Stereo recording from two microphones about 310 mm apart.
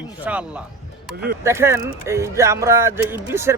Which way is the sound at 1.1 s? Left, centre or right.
Right.